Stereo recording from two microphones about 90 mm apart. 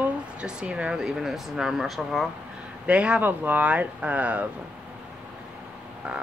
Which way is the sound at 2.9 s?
15° right (ahead or behind).